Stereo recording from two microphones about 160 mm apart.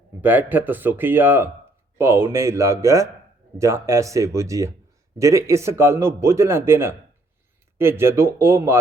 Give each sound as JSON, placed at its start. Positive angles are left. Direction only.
{"t": 0.2, "sound": "a man's voice", "side_deg": -10}